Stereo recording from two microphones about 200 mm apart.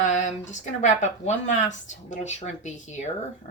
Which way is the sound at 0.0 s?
35° left (ahead or behind).